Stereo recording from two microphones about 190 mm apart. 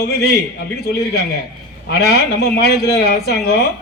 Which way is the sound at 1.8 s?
60° left (ahead or behind).